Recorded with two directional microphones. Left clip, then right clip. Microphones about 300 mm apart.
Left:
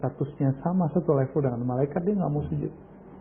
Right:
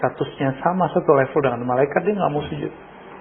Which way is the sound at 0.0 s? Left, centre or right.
Centre.